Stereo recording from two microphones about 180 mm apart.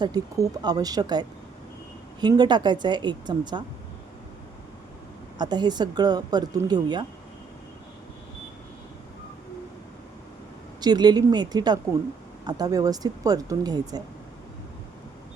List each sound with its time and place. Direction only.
0.0 s speech: 20° right (ahead or behind)
2.2 s speech: 25° right (ahead or behind)
5.4 s speech: 25° right (ahead or behind)
10.8 s speech: 25° right (ahead or behind)